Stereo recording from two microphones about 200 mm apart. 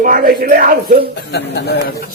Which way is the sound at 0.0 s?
45° right (ahead or behind).